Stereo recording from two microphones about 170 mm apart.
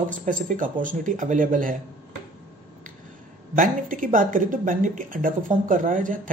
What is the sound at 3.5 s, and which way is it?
Speech, 50° right (ahead or behind).